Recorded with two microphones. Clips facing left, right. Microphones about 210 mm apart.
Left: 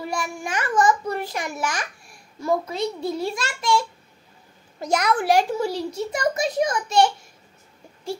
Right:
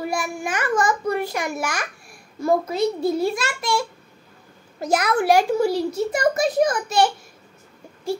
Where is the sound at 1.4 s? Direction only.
10° right (ahead or behind).